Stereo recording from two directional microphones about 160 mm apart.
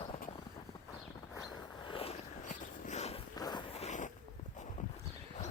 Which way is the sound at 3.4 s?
25° left (ahead or behind).